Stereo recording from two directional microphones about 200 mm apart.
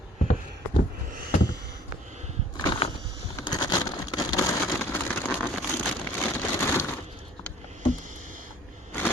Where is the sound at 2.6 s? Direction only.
20° left (ahead or behind).